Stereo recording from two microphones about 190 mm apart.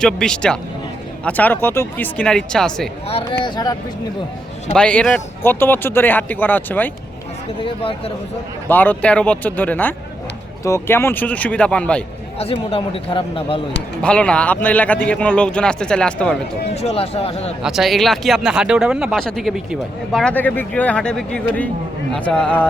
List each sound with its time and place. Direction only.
0.0 s speech: 5° left (ahead or behind)
3.4 s speech: 20° left (ahead or behind)
4.7 s speech: 5° left (ahead or behind)
7.6 s speech: 30° left (ahead or behind)
8.6 s speech: 10° left (ahead or behind)
12.4 s speech: 30° left (ahead or behind)
14.0 s speech: 5° left (ahead or behind)
16.7 s speech: 30° left (ahead or behind)
17.6 s speech: centre (ahead or behind)